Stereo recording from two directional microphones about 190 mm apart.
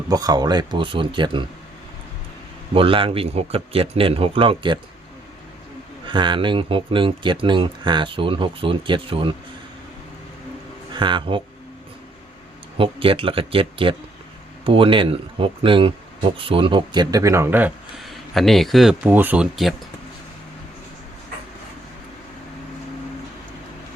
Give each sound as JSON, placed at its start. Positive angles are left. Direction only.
{"t": 0.1, "sound": "speech", "side_deg": -20}
{"t": 2.7, "sound": "speech", "side_deg": -30}
{"t": 6.1, "sound": "speech", "side_deg": -25}
{"t": 10.9, "sound": "speech", "side_deg": -25}
{"t": 12.7, "sound": "speech", "side_deg": -30}